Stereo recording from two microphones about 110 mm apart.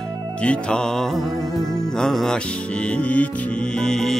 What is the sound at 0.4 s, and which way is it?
Music, 10° left (ahead or behind).